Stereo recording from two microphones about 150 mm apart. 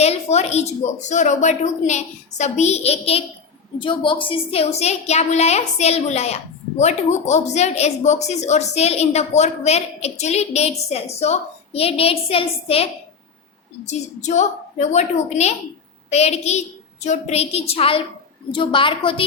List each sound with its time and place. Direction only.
0.0 s a woman's voice: 45° left (ahead or behind)
13.8 s a woman's voice: 50° left (ahead or behind); by 19.2 s 35° left (ahead or behind)